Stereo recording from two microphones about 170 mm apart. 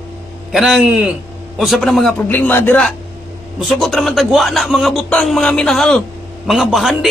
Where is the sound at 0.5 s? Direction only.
Centre (ahead or behind).